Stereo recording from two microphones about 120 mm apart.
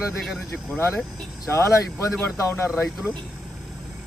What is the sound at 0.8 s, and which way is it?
Speech, 20° left (ahead or behind).